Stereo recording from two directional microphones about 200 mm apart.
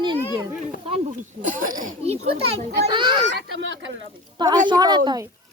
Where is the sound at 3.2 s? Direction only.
65° right (ahead or behind).